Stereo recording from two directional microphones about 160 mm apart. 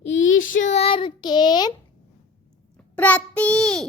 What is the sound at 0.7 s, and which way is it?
Child singing, 35° left (ahead or behind).